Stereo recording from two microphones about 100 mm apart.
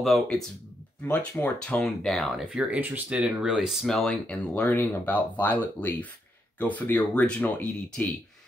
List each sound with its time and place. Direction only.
0.0 s speech: 5° left (ahead or behind)
1.0 s speech: 20° left (ahead or behind)
1.8 s speech: 5° left (ahead or behind)
2.4 s speech: 15° right (ahead or behind); by 7.7 s 15° left (ahead or behind)